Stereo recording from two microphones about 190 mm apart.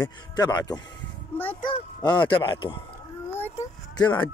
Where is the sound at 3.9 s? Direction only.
20° left (ahead or behind).